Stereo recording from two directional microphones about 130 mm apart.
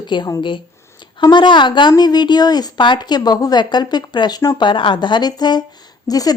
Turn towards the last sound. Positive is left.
turn(degrees=30)  # may be behind; listen again after turning